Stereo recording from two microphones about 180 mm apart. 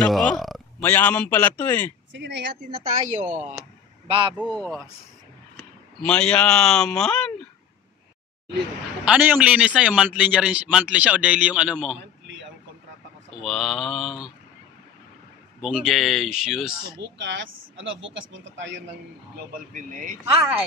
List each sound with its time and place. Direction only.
0.0 s a man's voice: 5° left (ahead or behind)
2.1 s speech: 75° right (ahead or behind)
3.1 s a man's voice: 45° right (ahead or behind)
4.1 s speech: 30° right (ahead or behind)
5.9 s speech: 5° left (ahead or behind)
9.0 s a man's voice: 10° right (ahead or behind)
13.4 s speech: centre (ahead or behind)
15.6 s speech: centre (ahead or behind)
17.0 s speech: 75° right (ahead or behind)
19.7 s a man's voice: 45° right (ahead or behind)